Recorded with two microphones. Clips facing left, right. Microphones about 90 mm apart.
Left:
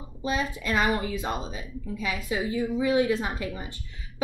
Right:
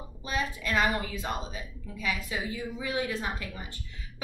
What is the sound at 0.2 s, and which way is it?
A woman's voice, 20° left (ahead or behind).